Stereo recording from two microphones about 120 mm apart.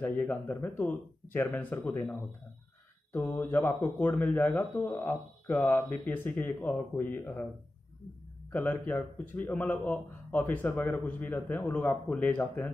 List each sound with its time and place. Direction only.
0.0 s a man's voice: 15° left (ahead or behind)
3.1 s a man's voice: 15° left (ahead or behind)
8.5 s a man's voice: 15° left (ahead or behind)